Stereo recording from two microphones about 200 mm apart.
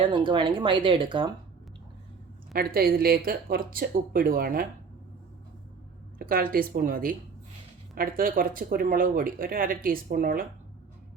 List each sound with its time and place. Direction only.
0.0 s speech: 25° right (ahead or behind)
2.5 s speech: 50° right (ahead or behind)
6.1 s speech: 45° right (ahead or behind)